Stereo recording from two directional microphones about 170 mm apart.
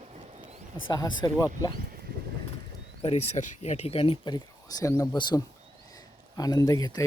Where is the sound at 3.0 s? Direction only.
40° left (ahead or behind).